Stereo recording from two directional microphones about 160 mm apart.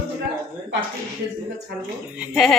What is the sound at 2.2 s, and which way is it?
Speech, centre (ahead or behind).